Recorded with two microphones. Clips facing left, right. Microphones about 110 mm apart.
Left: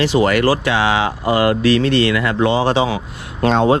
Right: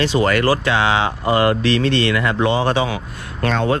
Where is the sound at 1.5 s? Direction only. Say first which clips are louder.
Left 2 dB; 25° right (ahead or behind).